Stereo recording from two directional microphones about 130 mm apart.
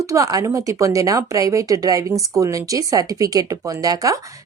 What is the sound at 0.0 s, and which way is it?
Speech, 25° right (ahead or behind).